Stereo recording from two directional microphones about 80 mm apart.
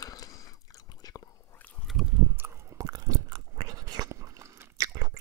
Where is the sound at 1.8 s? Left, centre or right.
Centre.